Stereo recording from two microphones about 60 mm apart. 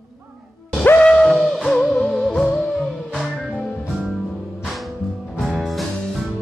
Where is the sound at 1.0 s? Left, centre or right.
Centre.